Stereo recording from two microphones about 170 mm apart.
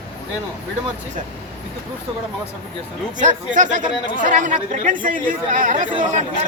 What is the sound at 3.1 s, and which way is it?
Speech, 45° right (ahead or behind).